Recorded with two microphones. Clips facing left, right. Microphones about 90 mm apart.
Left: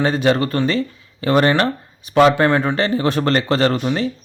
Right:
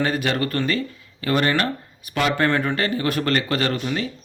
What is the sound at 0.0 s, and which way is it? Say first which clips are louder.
Speech: left 6 dB; 25° left (ahead or behind).